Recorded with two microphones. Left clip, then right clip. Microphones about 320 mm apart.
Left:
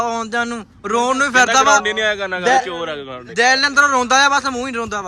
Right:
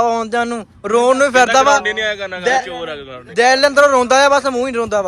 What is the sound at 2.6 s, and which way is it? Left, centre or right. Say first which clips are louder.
Speech: left 1 dB; left.